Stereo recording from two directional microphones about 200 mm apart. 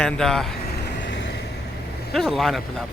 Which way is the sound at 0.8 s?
60° left (ahead or behind).